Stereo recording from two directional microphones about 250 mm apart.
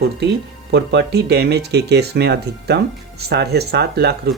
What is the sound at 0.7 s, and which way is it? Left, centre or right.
Speech, right.